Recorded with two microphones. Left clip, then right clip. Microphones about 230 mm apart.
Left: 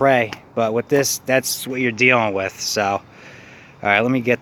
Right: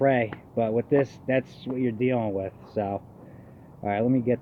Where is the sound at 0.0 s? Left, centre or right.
Left.